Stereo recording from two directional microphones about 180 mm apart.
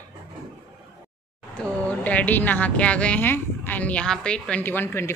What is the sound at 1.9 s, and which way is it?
Speech, 10° left (ahead or behind).